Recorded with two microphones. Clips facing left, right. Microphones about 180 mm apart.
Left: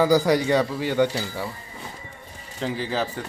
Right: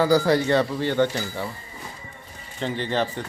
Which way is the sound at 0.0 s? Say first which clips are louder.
Even; 15° left (ahead or behind).